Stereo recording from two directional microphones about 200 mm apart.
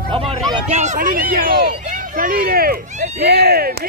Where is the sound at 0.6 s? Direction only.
35° right (ahead or behind).